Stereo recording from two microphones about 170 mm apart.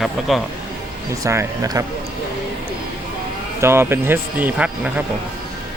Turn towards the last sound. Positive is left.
turn(degrees=-10)  # may be behind; listen again after turning